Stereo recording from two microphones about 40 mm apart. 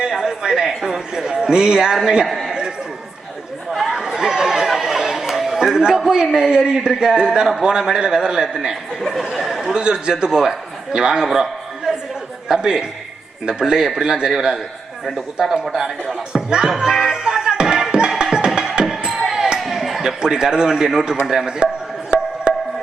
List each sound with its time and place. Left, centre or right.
0.1 s a sound: centre
0.8 s a man's voice: centre
2.5 s a sound: centre
3.7 s chatter: centre
4.9 s a man's voice: centre
9.0 s speech: centre
9.6 s a man's voice: centre
11.9 s chatter: centre
12.5 s a man's voice: centre
16.3 s music: centre
19.2 s a sound: centre
20.0 s a man's voice: centre
22.5 s music: right